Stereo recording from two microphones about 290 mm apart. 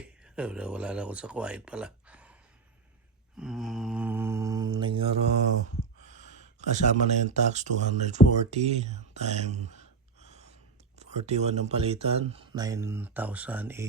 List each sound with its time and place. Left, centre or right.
0.3 s speech: centre
3.3 s mantra: centre; by 10.5 s right
10.9 s speech: right; by 13.8 s centre